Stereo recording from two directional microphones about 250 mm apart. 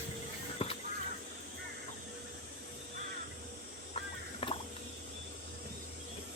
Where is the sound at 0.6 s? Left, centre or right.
Left.